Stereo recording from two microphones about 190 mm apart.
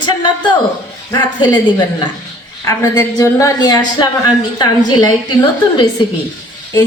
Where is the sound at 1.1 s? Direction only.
20° left (ahead or behind).